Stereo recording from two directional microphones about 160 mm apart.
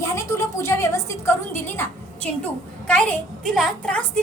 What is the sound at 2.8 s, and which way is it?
A woman's voice, 5° left (ahead or behind).